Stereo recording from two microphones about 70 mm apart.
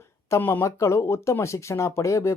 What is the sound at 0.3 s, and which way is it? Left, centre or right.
Speech, left.